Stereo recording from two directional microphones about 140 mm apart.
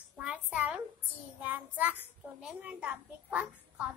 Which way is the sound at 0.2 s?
10° right (ahead or behind).